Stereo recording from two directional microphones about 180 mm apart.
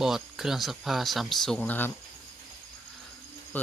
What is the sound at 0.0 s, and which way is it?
Speech, centre (ahead or behind).